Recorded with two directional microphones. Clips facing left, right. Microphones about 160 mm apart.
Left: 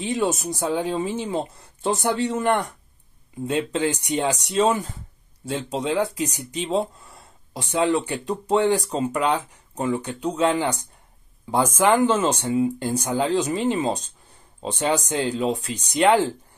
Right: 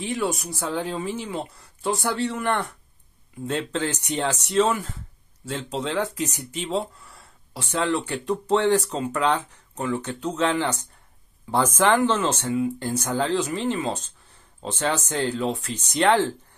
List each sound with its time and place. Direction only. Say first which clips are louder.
0.0 s speech: left 3 dB; 20° left (ahead or behind)